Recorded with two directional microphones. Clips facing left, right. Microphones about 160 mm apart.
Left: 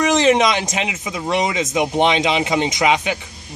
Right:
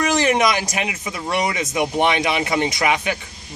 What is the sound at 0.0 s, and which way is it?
Speech, 20° left (ahead or behind).